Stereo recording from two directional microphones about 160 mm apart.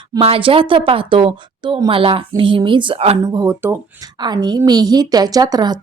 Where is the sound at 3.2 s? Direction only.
20° right (ahead or behind).